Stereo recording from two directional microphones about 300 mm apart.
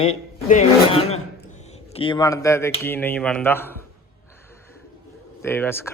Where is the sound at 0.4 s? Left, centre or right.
Left; by 3.8 s centre.